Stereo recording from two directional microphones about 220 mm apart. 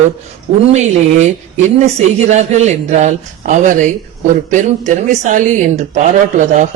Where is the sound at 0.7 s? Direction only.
30° right (ahead or behind).